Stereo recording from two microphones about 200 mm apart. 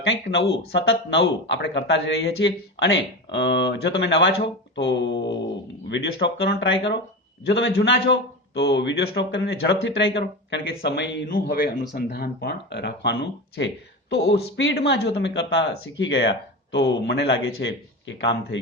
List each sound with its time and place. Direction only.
0.3 s speech: 55° left (ahead or behind)
11.3 s speech: 50° left (ahead or behind)